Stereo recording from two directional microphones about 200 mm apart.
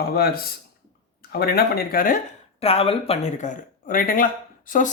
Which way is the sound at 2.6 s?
30° left (ahead or behind).